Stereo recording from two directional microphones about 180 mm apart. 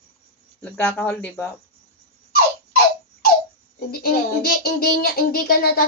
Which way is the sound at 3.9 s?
55° left (ahead or behind).